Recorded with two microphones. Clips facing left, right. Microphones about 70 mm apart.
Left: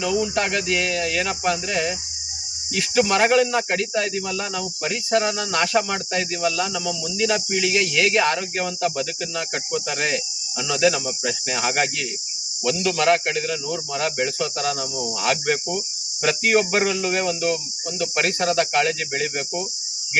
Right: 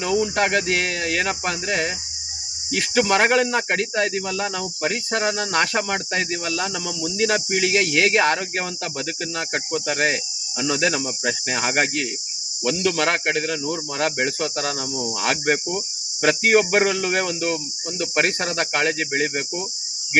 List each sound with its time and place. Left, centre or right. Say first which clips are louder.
0.0 s speech: right 2 dB; right